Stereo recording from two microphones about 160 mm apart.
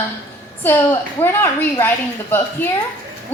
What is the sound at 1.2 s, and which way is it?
A woman's voice, 15° left (ahead or behind).